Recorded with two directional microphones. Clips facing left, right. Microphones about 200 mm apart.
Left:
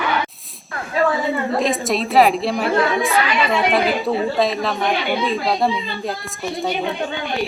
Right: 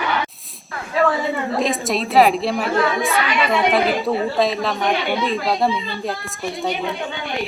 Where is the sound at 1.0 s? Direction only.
Centre (ahead or behind).